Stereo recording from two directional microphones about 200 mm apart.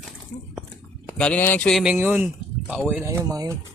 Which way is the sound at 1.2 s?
10° left (ahead or behind).